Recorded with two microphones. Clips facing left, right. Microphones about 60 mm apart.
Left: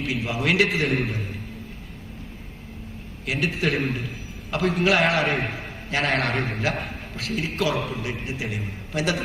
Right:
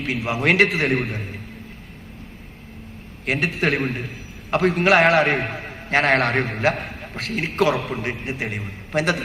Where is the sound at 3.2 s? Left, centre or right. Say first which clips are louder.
Right 3 dB; right.